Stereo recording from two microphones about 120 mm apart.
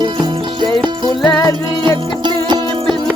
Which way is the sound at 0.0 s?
40° right (ahead or behind).